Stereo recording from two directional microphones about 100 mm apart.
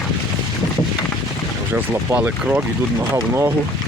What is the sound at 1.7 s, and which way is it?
Speech, 20° right (ahead or behind).